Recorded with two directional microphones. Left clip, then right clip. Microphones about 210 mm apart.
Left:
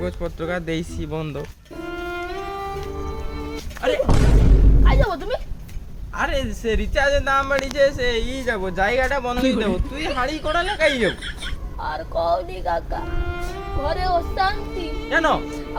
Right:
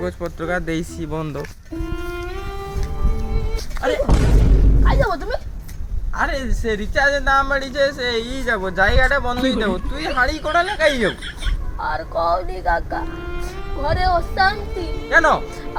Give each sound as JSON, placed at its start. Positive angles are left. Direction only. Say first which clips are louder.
{"t": 0.0, "sound": "speech", "louder": "right 2 dB", "side_deg": 0}
{"t": 1.4, "sound": "music", "louder": "right 3 dB", "side_deg": 0}
{"t": 3.8, "sound": "speech", "louder": "even", "side_deg": 15}
{"t": 4.0, "sound": "speech", "louder": "even", "side_deg": 0}
{"t": 6.1, "sound": "speech", "louder": "right 1 dB", "side_deg": 10}
{"t": 11.8, "sound": "speech", "louder": "right 3 dB", "side_deg": -15}
{"t": 13.1, "sound": "music", "louder": "left 1 dB", "side_deg": 0}
{"t": 13.8, "sound": "speech", "louder": "right 3 dB", "side_deg": -10}
{"t": 15.0, "sound": "speech", "louder": "right 5 dB", "side_deg": 0}